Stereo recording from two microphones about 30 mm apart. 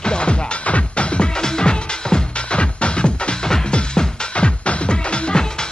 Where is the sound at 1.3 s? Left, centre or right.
Left.